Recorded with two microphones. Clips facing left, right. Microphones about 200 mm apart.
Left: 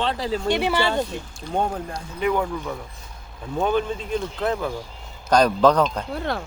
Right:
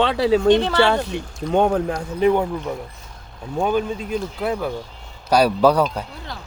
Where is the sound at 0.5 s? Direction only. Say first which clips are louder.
Right 5 dB; 10° left (ahead or behind).